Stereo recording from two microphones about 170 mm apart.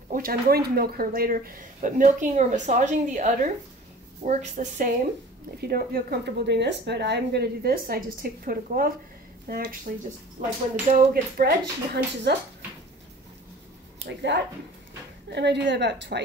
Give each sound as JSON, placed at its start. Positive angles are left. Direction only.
{"t": 0.1, "sound": "speech", "side_deg": -60}
{"t": 5.6, "sound": "a woman's voice", "side_deg": -65}
{"t": 10.9, "sound": "speech", "side_deg": -65}
{"t": 14.0, "sound": "a woman's voice", "side_deg": -90}